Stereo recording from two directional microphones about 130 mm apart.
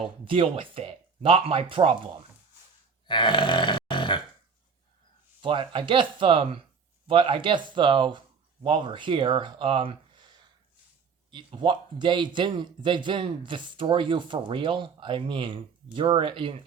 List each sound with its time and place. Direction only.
0.3 s speech: 45° right (ahead or behind)
3.1 s grunt: 35° left (ahead or behind)
5.4 s speech: 40° right (ahead or behind)